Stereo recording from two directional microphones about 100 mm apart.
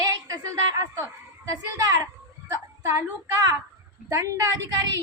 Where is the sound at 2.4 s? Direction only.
25° right (ahead or behind).